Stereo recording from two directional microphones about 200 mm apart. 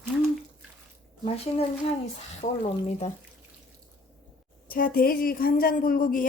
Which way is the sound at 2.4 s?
35° left (ahead or behind).